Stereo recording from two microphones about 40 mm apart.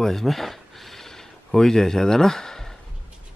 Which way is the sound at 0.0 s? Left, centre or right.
Centre.